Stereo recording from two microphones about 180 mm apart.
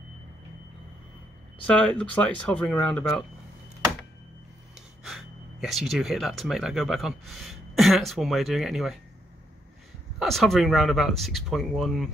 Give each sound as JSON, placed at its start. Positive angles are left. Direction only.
{"t": 1.8, "sound": "speech", "side_deg": 5}
{"t": 4.7, "sound": "speech", "side_deg": 0}
{"t": 10.1, "sound": "speech", "side_deg": 0}